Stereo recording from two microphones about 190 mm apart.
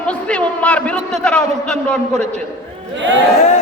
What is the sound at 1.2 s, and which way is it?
Speech, 5° left (ahead or behind).